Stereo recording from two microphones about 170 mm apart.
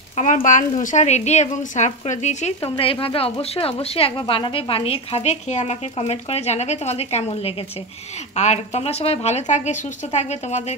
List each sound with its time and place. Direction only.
0.1 s a woman's voice: 45° left (ahead or behind)